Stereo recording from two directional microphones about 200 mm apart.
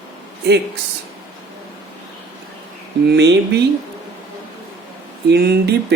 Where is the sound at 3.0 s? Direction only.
55° right (ahead or behind).